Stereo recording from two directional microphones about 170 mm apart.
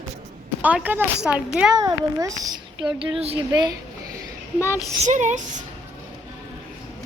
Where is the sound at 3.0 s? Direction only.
35° right (ahead or behind).